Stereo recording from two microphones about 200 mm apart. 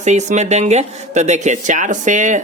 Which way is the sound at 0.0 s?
35° right (ahead or behind).